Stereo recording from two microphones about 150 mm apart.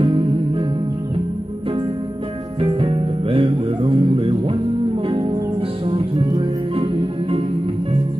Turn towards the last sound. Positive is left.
turn(degrees=-35)  # may be behind; listen again after turning